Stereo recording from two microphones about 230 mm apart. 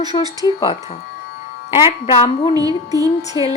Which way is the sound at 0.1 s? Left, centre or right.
Centre.